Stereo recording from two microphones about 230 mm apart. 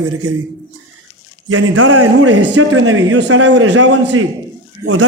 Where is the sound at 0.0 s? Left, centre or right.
Right.